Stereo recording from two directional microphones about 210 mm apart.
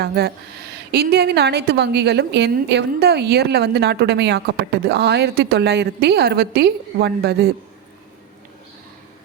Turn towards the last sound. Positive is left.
turn(degrees=-50)  # may be behind; listen again after turning